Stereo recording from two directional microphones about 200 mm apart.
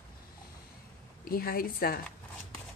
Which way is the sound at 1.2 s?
50° left (ahead or behind).